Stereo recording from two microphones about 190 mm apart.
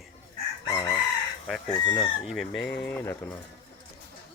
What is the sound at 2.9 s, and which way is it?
Speech, 10° left (ahead or behind).